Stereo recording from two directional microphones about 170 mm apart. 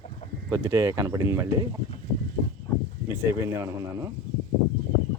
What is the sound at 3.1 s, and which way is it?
Speech, 15° right (ahead or behind).